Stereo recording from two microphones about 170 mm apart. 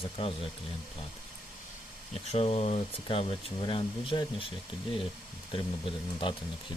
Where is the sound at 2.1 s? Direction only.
35° left (ahead or behind).